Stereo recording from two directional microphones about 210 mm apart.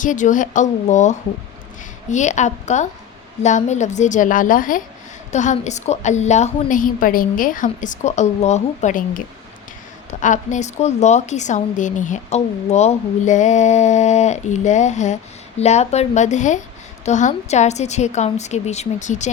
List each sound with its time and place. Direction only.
0.0 s a woman's voice: 35° left (ahead or behind)